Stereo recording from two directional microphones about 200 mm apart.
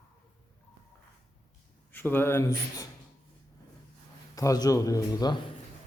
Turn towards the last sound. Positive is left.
turn(degrees=20)  # may be behind; listen again after turning